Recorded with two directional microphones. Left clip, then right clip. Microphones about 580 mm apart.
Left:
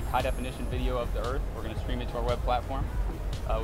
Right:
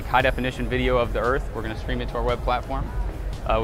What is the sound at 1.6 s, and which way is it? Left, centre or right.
Speech, right.